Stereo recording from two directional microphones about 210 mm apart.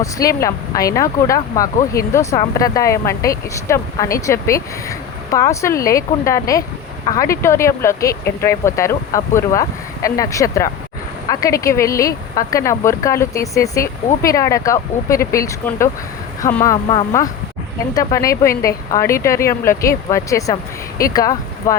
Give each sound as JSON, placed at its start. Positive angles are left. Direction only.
{"t": 0.0, "sound": "speech", "side_deg": 15}